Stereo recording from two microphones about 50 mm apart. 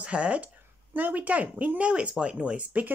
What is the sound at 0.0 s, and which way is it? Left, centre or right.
Speech, right.